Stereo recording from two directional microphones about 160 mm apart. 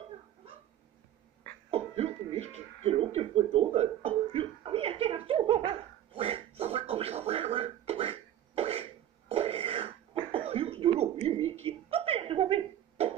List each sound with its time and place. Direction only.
1.7 s cough: 40° right (ahead or behind)